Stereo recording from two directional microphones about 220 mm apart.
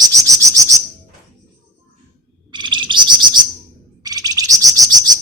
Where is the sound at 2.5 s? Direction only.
20° right (ahead or behind).